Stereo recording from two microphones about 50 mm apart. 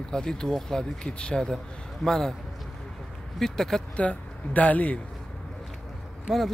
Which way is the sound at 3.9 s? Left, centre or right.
Left.